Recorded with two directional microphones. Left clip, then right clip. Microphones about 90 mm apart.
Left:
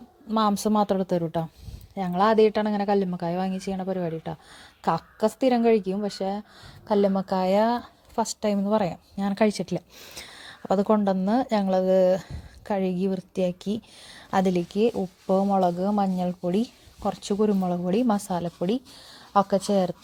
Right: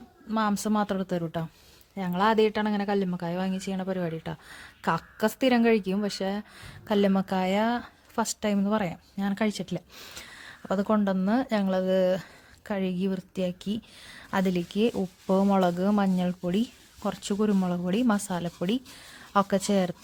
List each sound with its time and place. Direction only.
0.3 s a woman's voice: 35° left (ahead or behind); by 7.4 s centre (ahead or behind)
7.4 s speech: 15° left (ahead or behind)
8.1 s speech: centre (ahead or behind)
8.7 s a woman's voice: 20° left (ahead or behind)
9.1 s speech: 35° left (ahead or behind)
10.2 s a sound: 30° left (ahead or behind)
10.6 s a woman's voice: 30° left (ahead or behind)
15.5 s speech: 10° right (ahead or behind)
16.5 s speech: 10° left (ahead or behind)
17.7 s speech: 10° left (ahead or behind)